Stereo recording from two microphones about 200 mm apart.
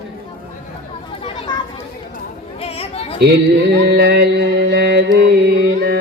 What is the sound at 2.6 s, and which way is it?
Chatter, 30° left (ahead or behind).